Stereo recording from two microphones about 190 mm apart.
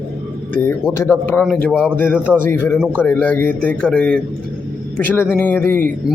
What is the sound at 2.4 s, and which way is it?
A man's voice, 10° left (ahead or behind).